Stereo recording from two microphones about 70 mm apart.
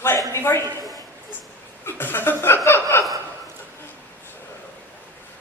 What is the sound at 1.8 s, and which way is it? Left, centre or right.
Chuckle, left.